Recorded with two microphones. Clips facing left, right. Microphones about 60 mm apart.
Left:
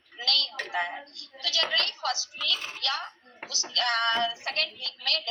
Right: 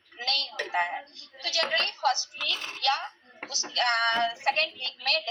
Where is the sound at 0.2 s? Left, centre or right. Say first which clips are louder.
Left 2 dB; right.